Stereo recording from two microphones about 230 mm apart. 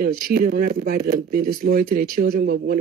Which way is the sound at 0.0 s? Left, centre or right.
Right.